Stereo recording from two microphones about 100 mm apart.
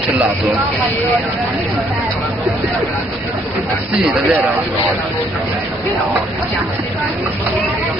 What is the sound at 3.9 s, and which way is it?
Speech, 5° right (ahead or behind).